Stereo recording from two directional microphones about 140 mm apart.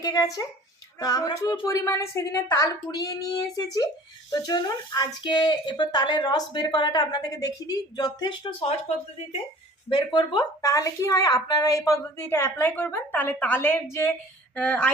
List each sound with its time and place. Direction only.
0.0 s speech: 25° left (ahead or behind)
9.9 s a woman's voice: 30° left (ahead or behind); by 14.9 s 10° left (ahead or behind)